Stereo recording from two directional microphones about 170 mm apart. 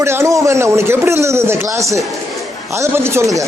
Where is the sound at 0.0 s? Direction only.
15° right (ahead or behind).